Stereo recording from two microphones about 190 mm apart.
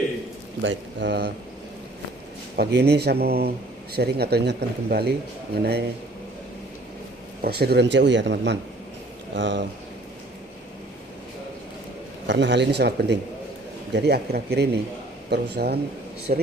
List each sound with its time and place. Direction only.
0.6 s speech: 70° right (ahead or behind)
2.6 s speech: 60° right (ahead or behind)
7.4 s speech: 55° right (ahead or behind)
12.3 s speech: 70° right (ahead or behind)
16.3 s speech: 45° right (ahead or behind)